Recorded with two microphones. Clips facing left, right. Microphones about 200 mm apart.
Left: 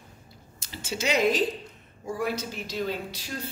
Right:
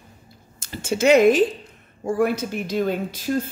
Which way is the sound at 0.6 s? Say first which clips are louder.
Right 10 dB; 50° right (ahead or behind).